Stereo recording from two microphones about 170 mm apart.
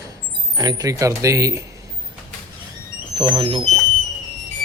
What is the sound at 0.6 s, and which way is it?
Speech, 20° right (ahead or behind).